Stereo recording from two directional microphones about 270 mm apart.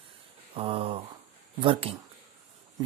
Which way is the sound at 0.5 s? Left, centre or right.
Right.